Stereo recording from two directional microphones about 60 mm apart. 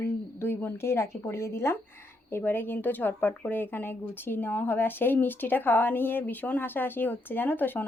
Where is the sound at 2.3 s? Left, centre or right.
Left.